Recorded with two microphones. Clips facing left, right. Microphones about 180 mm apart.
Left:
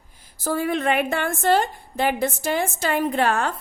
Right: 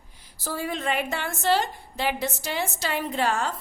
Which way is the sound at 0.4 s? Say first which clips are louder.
Left 6 dB; 55° left (ahead or behind).